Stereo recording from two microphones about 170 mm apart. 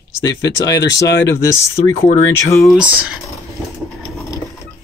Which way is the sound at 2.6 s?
5° right (ahead or behind).